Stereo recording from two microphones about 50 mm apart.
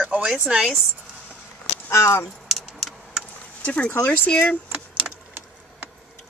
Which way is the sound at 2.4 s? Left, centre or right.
Centre.